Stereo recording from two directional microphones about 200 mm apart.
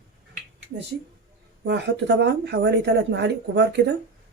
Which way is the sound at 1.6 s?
60° right (ahead or behind).